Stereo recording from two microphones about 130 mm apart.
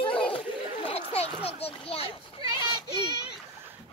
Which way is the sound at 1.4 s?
50° left (ahead or behind).